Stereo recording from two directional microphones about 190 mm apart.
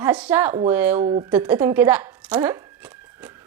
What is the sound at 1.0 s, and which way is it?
Speech, 25° right (ahead or behind).